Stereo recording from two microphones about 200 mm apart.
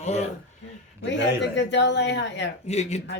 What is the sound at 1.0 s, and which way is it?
A woman's voice, 65° left (ahead or behind).